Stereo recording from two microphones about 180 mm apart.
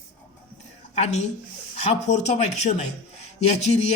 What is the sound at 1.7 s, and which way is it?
Speech, 40° left (ahead or behind).